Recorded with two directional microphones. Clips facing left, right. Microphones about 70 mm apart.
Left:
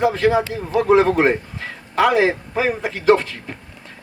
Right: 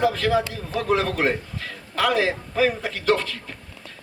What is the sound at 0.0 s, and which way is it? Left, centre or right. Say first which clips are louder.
A man's voice: left 4 dB; left.